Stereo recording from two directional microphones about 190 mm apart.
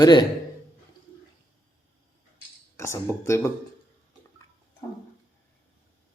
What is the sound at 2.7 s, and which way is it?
Speech, 15° left (ahead or behind).